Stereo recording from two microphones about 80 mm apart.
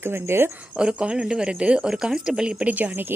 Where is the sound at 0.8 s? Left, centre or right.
Centre.